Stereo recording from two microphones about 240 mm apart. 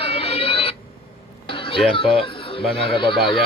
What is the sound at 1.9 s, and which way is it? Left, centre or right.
Speech, left.